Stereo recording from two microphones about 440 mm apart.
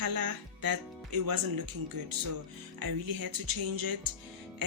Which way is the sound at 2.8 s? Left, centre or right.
Right.